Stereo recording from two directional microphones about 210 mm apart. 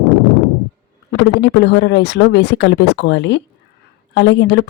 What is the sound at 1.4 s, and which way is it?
Speech, 55° left (ahead or behind).